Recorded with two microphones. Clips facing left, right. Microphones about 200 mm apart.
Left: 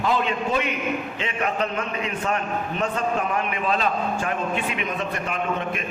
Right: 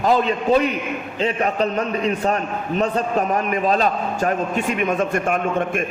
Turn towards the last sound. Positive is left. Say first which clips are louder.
# right 5 dB
turn(degrees=-50)  # may be behind; listen again after turning